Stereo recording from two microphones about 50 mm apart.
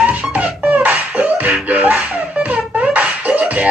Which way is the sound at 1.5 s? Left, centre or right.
Right.